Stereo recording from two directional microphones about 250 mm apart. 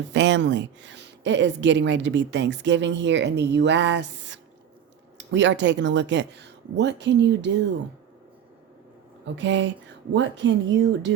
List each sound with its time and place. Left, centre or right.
0.1 s a woman's voice: right
9.2 s a woman's voice: right